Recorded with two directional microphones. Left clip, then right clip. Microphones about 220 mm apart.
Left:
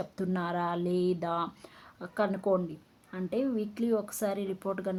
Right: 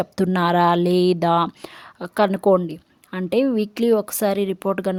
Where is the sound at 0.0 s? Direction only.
45° right (ahead or behind).